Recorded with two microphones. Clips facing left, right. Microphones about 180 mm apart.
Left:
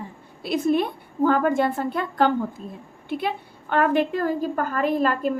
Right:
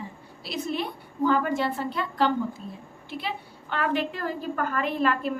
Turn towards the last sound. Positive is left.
turn(degrees=40)  # may be behind; listen again after turning